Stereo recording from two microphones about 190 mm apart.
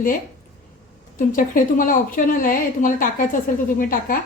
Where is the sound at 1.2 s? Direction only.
45° left (ahead or behind).